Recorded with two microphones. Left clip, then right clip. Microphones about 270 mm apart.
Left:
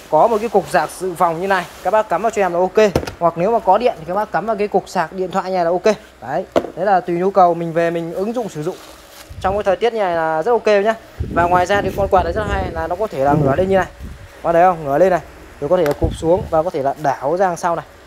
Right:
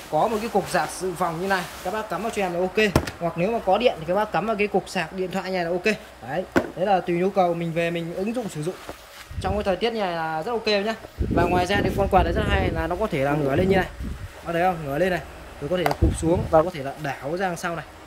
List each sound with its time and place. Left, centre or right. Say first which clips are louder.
0.1 s speech: left 9 dB; left
0.7 s speech: left 8 dB; centre
9.4 s speech: left 8 dB; centre